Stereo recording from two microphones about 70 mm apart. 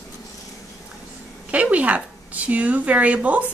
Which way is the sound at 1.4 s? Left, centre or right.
Centre.